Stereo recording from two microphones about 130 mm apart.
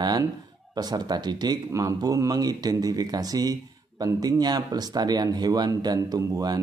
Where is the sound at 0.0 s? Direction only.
30° right (ahead or behind).